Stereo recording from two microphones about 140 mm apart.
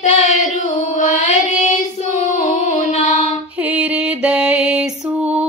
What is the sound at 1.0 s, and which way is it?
Carnatic music, 65° left (ahead or behind).